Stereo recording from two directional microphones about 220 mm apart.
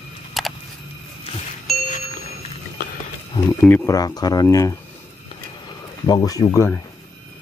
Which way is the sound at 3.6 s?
5° left (ahead or behind).